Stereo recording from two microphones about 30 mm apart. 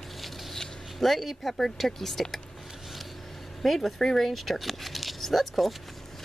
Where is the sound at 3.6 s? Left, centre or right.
Centre.